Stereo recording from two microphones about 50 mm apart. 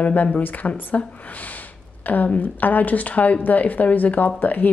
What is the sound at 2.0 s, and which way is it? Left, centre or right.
Speech, left.